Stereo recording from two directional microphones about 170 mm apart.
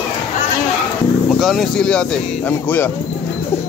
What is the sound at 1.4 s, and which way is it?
Speech, centre (ahead or behind).